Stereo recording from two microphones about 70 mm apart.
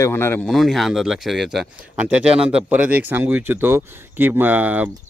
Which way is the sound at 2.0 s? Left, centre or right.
Centre.